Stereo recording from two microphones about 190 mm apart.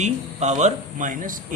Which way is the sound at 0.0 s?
35° right (ahead or behind).